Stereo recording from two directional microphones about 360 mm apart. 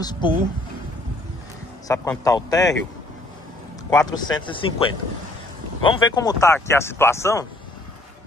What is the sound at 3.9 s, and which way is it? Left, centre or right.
Speech, centre.